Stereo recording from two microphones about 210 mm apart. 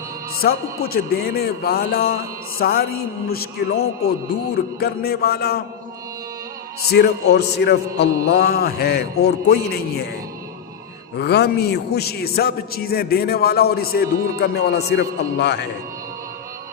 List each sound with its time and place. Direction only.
0.4 s a man's voice: 45° left (ahead or behind)
6.9 s a man's voice: 50° left (ahead or behind)
11.2 s a man's voice: 50° left (ahead or behind)